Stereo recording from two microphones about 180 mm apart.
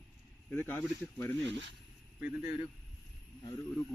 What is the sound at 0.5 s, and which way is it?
Speech, 10° left (ahead or behind).